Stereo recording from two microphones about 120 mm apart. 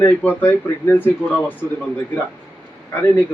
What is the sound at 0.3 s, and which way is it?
Speech, 15° left (ahead or behind).